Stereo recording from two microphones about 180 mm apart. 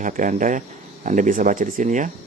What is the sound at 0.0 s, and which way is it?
Speech, 45° right (ahead or behind).